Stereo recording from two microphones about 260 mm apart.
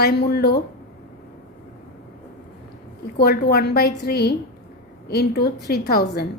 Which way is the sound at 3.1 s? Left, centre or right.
Left.